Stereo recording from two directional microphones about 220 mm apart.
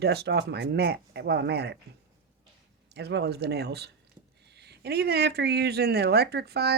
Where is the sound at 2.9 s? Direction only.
50° right (ahead or behind).